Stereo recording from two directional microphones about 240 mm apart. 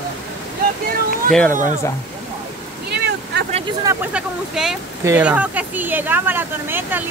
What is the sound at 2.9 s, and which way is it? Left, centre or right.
Vehicle, right.